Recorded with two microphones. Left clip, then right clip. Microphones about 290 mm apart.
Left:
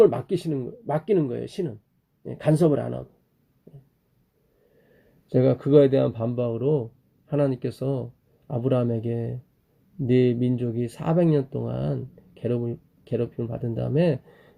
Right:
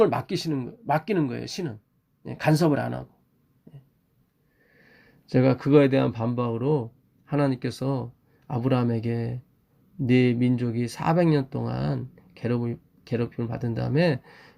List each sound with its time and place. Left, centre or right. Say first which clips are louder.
0.0 s speech: left 3 dB; right
5.3 s speech: left 1 dB; right